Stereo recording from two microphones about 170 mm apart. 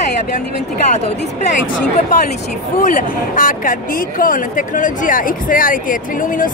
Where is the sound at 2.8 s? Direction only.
50° left (ahead or behind).